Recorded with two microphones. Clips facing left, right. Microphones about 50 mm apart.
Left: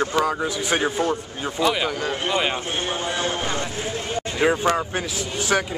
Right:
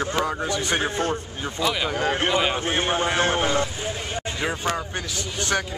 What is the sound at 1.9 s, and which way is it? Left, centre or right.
Speech, right.